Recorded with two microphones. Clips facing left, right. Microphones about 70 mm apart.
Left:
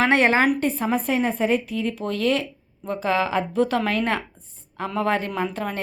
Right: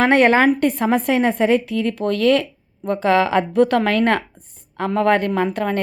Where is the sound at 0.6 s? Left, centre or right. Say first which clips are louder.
Right 5 dB; right.